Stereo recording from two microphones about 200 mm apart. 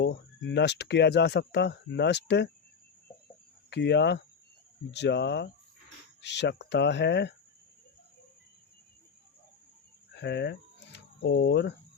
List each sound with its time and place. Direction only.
0.0 s speech: 60° left (ahead or behind)
3.7 s speech: 60° left (ahead or behind)
10.2 s speech: 55° left (ahead or behind)